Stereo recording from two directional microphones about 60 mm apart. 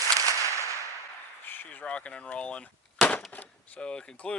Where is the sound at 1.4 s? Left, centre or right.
Left.